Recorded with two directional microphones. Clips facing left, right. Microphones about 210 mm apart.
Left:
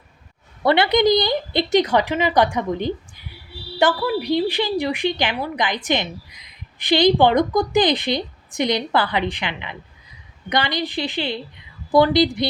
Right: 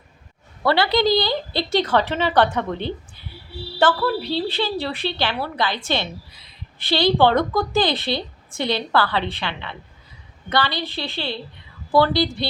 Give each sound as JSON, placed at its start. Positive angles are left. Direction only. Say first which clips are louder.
{"t": 0.6, "sound": "a woman's voice", "louder": "left 2 dB", "side_deg": 20}